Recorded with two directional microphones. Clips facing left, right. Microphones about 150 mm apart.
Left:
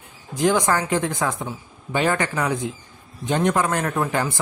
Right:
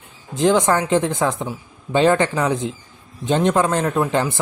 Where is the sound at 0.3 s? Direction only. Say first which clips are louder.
Right 3 dB; 20° right (ahead or behind).